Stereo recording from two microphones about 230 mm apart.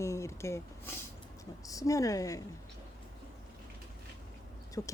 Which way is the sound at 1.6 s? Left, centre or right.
Centre.